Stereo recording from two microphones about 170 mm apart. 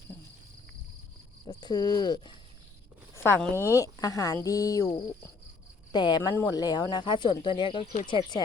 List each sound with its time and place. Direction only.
1.5 s speech: 25° left (ahead or behind)
3.2 s speech: 15° left (ahead or behind)
3.5 s speech: 15° right (ahead or behind)
3.8 s speech: 20° left (ahead or behind)